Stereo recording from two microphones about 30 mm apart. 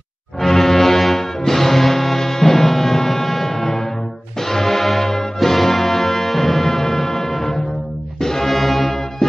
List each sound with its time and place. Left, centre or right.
0.4 s music: centre
8.5 s music: centre